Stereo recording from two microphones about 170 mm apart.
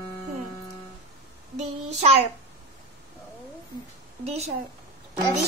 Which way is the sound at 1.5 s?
40° right (ahead or behind).